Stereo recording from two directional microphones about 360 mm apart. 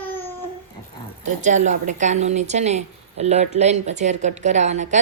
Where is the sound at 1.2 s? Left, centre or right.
Centre.